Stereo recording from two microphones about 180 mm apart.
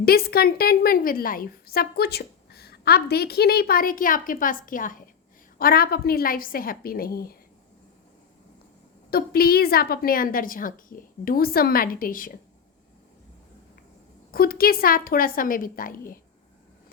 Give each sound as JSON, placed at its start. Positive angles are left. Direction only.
{"t": 0.0, "sound": "a woman's voice", "side_deg": 60}
{"t": 9.0, "sound": "a woman's voice", "side_deg": 60}
{"t": 14.3, "sound": "a woman's voice", "side_deg": 55}